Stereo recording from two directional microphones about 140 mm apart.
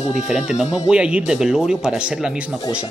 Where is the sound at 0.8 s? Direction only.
5° right (ahead or behind).